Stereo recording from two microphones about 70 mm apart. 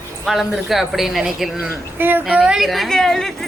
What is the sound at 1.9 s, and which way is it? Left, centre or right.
Speech, right.